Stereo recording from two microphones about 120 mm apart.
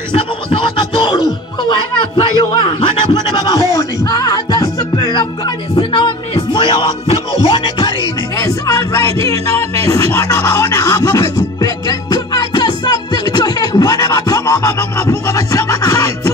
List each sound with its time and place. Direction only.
0.1 s music: 45° left (ahead or behind); by 4.8 s 30° left (ahead or behind)
4.9 s music: 40° left (ahead or behind)
8.4 s music: 30° left (ahead or behind)
13.3 s speech: 35° left (ahead or behind)